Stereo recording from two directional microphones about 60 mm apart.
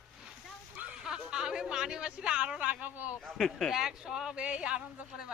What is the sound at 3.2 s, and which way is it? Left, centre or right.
Speech, centre.